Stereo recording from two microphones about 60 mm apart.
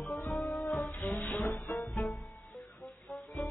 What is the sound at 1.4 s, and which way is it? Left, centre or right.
Music, left.